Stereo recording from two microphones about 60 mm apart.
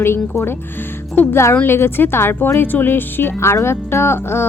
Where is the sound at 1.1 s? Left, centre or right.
Left.